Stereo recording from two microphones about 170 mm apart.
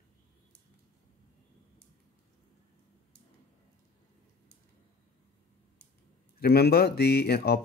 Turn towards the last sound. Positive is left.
turn(degrees=65)  # may be behind; listen again after turning